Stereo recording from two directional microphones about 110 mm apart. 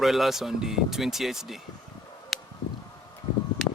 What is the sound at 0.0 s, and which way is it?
Speech, centre (ahead or behind).